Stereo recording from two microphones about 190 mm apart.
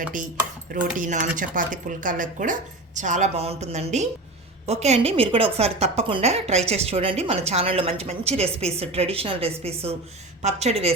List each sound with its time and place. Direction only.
0.7 s a woman's voice: 45° right (ahead or behind)